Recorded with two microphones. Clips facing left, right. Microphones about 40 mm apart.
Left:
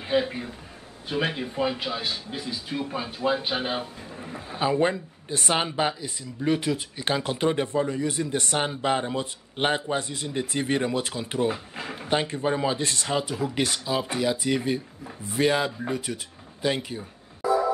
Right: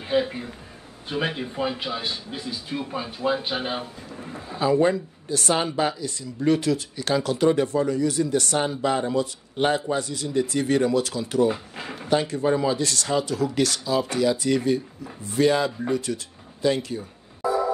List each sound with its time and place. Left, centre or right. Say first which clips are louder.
0.0 s a man's voice: right 1 dB; centre
4.5 s speech: right 3 dB; left
11.5 s speech: even; centre
12.1 s speech: right 3 dB; left